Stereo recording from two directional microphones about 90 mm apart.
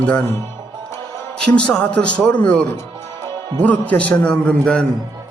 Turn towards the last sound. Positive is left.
turn(degrees=10)  # may be behind; listen again after turning